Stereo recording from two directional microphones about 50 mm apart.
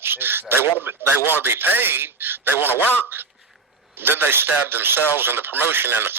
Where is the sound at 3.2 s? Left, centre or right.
Right.